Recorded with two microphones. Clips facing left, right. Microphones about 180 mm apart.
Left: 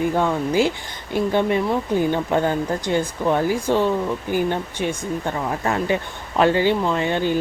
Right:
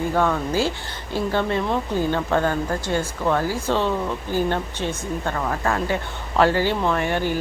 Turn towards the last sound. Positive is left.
turn(degrees=20)  # may be behind; listen again after turning